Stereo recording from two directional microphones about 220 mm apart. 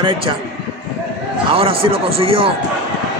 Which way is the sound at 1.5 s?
25° right (ahead or behind).